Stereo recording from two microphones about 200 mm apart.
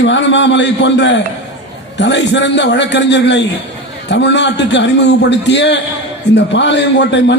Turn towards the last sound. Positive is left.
turn(degrees=60)  # may be behind; listen again after turning